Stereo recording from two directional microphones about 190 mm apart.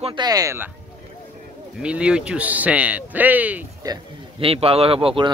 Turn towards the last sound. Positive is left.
turn(degrees=-30)  # may be behind; listen again after turning